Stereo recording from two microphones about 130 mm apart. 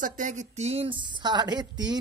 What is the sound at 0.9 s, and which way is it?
A woman's voice, 35° right (ahead or behind).